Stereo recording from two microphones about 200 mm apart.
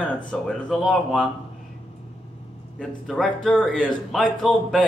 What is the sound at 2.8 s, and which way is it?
Speech, 5° left (ahead or behind).